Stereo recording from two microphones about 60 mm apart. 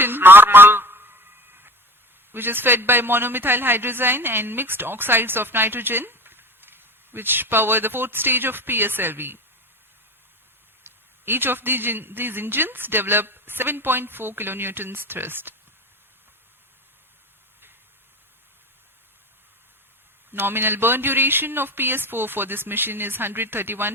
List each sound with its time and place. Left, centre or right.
0.0 s a sound: right
2.3 s a man's voice: right
10.8 s a man's voice: right
20.3 s a man's voice: right